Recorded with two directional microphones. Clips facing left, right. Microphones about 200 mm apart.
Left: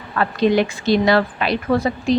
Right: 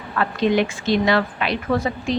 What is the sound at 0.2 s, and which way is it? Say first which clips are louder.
A woman's voice: left 2 dB; 35° left (ahead or behind).